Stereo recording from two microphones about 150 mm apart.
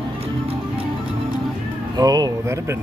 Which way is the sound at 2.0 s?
25° right (ahead or behind).